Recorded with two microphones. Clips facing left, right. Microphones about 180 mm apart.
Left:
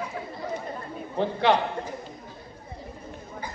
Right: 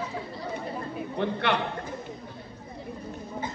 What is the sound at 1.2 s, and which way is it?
Speech, 60° right (ahead or behind).